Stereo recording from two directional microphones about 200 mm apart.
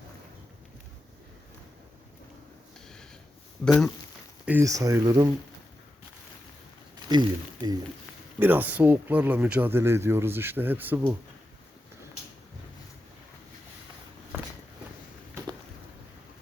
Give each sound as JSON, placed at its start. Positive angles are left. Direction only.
{"t": 3.6, "sound": "speech", "side_deg": 0}
{"t": 4.4, "sound": "speech", "side_deg": -15}
{"t": 7.1, "sound": "speech", "side_deg": -20}
{"t": 8.4, "sound": "speech", "side_deg": -10}